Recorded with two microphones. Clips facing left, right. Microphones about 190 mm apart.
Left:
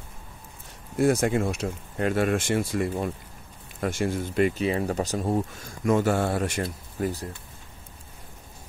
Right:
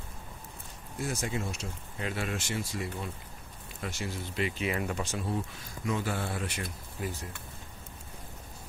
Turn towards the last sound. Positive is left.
turn(degrees=45)  # may be behind; listen again after turning